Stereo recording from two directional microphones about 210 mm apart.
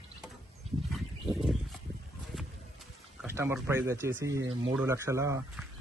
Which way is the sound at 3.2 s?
10° right (ahead or behind).